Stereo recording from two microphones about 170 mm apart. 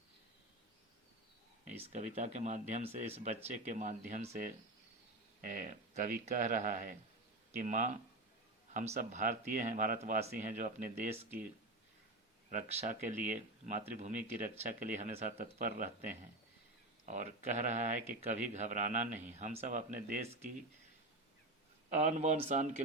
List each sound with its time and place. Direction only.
1.8 s speech: 45° right (ahead or behind)
5.4 s speech: 50° right (ahead or behind)
12.5 s speech: 45° right (ahead or behind)
15.5 s speech: 55° right (ahead or behind)
21.8 s speech: 45° right (ahead or behind)